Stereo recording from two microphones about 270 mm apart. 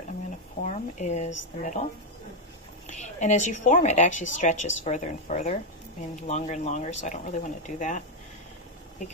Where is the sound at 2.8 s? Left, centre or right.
Left.